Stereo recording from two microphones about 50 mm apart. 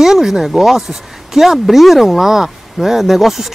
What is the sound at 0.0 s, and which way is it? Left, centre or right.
Speech, centre.